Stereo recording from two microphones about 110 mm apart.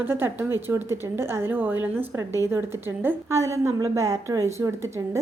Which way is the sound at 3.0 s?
25° right (ahead or behind).